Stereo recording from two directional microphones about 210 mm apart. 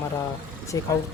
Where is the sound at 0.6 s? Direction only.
15° left (ahead or behind).